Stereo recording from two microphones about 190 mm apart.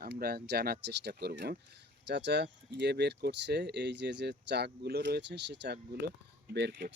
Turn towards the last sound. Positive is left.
turn(degrees=-55)  # may be behind; listen again after turning